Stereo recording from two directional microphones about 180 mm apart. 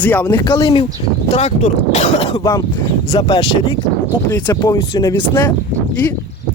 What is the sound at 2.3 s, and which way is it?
Speech, 20° left (ahead or behind).